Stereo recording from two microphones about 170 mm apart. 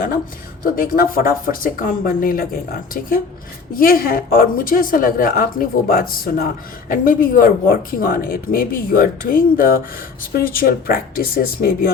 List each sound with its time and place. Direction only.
0.6 s a woman's voice: 55° left (ahead or behind)